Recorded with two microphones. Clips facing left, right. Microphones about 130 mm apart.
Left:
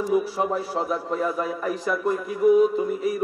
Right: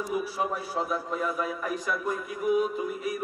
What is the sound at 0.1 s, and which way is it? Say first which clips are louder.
A man's voice: left 7 dB; 30° left (ahead or behind).